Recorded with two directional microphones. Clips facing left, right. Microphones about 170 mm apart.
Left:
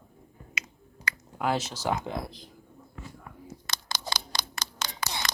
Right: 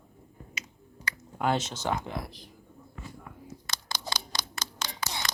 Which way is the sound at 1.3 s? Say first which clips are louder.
Right 1 dB; centre (ahead or behind).